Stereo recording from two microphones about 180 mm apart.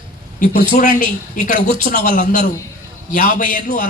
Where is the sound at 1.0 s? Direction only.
30° right (ahead or behind).